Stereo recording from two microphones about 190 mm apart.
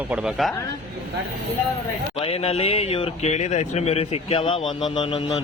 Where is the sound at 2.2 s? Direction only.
30° left (ahead or behind).